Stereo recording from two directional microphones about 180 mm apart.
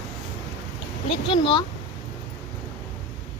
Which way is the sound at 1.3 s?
25° left (ahead or behind).